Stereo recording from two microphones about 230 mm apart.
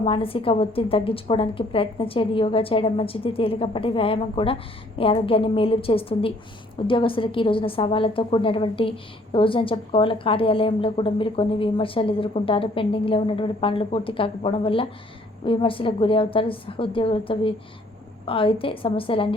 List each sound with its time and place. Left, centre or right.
0.0 s a woman's voice: left